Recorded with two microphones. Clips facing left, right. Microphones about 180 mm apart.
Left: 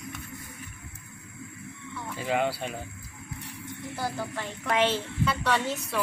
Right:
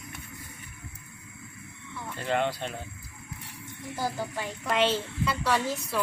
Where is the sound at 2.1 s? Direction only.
5° left (ahead or behind).